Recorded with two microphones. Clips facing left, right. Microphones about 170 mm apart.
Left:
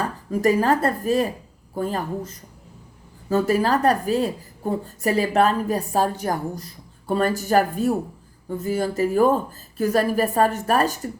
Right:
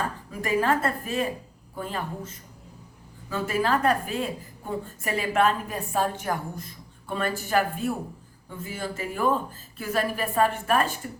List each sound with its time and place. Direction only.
0.3 s a woman's voice: 40° left (ahead or behind)